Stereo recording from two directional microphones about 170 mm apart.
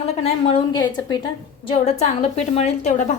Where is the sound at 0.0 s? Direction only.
35° left (ahead or behind).